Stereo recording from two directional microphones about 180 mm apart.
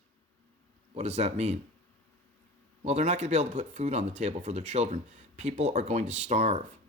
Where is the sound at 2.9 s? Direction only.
40° right (ahead or behind).